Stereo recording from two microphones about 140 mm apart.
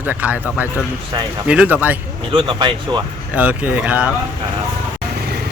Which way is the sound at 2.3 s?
35° right (ahead or behind).